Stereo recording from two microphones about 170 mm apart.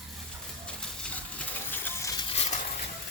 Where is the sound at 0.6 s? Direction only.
5° left (ahead or behind).